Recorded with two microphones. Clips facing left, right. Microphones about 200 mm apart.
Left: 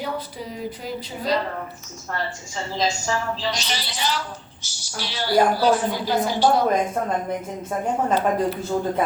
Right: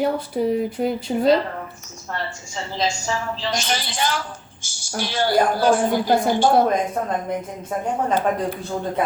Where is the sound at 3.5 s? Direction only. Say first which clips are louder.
Right 3 dB; 50° right (ahead or behind).